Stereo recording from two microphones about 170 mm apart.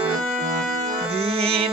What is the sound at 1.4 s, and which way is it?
Mantra, 35° right (ahead or behind).